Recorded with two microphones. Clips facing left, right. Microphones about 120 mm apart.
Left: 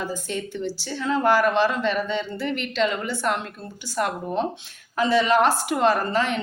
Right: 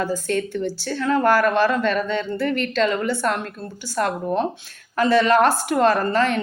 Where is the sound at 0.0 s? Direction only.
15° left (ahead or behind).